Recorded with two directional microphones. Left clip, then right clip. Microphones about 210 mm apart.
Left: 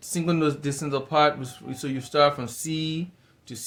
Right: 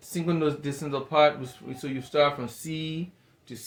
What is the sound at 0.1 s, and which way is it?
Speech, 35° left (ahead or behind).